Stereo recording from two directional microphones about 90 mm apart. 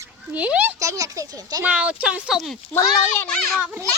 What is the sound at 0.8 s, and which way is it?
Speech, 40° right (ahead or behind).